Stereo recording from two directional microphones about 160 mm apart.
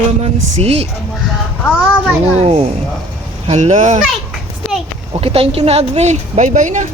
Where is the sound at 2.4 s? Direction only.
40° right (ahead or behind).